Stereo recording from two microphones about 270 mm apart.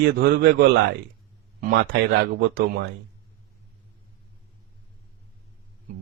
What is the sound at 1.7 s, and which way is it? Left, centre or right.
Speech, right.